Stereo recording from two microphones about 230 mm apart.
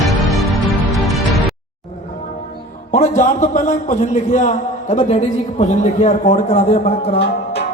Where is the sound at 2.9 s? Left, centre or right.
Left.